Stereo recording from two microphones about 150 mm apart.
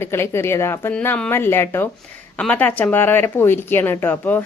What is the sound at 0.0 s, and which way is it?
Speech, 15° left (ahead or behind).